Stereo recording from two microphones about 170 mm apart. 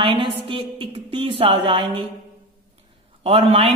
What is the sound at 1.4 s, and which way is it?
Speech, 35° right (ahead or behind).